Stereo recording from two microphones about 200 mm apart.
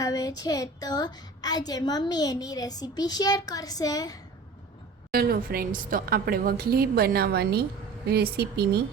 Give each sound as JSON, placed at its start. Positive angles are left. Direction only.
{"t": 0.0, "sound": "a woman's voice", "side_deg": 15}
{"t": 5.1, "sound": "a woman's voice", "side_deg": -45}